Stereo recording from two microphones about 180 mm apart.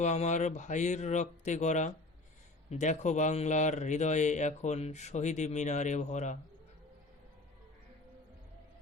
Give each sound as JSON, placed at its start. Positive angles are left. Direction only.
{"t": 0.0, "sound": "a man's voice", "side_deg": 40}